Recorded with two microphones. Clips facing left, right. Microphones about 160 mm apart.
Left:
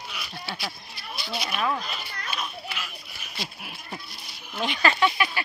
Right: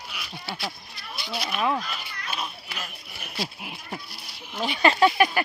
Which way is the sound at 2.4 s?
40° right (ahead or behind).